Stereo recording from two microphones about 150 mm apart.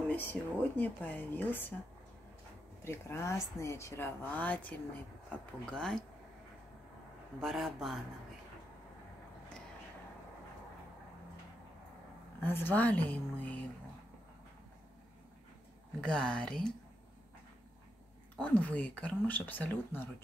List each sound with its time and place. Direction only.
0.1 s speech: 10° left (ahead or behind)
2.8 s speech: 15° left (ahead or behind)
7.3 s speech: centre (ahead or behind)
12.4 s speech: 15° left (ahead or behind)
16.0 s speech: 5° left (ahead or behind)
18.4 s speech: 10° left (ahead or behind)